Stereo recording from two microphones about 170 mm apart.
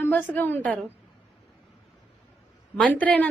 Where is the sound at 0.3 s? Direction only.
10° left (ahead or behind).